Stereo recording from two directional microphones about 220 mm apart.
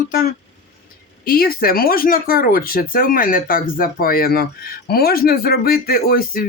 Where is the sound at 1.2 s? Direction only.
40° left (ahead or behind).